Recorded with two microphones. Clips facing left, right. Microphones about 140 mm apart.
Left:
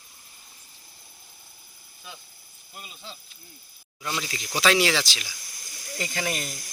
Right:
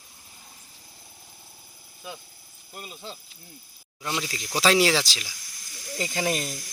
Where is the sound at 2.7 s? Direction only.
50° right (ahead or behind).